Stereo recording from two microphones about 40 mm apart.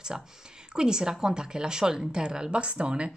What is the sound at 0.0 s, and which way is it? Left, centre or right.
Speech, centre.